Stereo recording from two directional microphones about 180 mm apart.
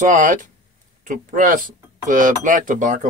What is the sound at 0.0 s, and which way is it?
Speech, 45° right (ahead or behind).